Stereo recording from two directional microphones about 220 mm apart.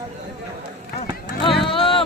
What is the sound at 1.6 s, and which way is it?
Vehicle, 25° left (ahead or behind).